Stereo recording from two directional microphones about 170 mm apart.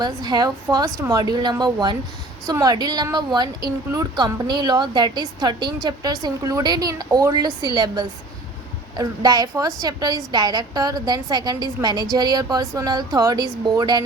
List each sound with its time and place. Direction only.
0.0 s a woman's voice: 25° right (ahead or behind)